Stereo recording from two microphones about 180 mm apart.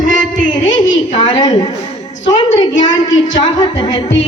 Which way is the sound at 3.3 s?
25° left (ahead or behind).